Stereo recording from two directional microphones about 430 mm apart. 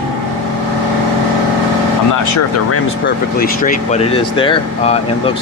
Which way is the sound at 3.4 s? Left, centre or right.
Centre.